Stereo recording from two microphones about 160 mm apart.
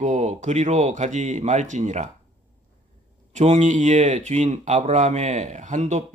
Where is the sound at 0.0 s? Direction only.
50° right (ahead or behind).